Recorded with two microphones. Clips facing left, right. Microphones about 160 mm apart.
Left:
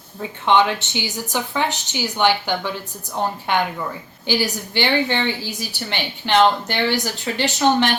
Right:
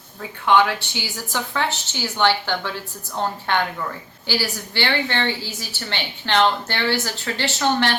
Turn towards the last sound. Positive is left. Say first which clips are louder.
# left 3 dB
turn(degrees=15)  # may be behind; listen again after turning